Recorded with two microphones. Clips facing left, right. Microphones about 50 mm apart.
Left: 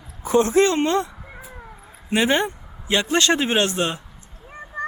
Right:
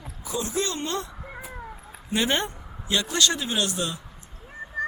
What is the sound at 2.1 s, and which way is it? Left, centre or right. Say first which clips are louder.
Vehicle: left 5 dB; centre.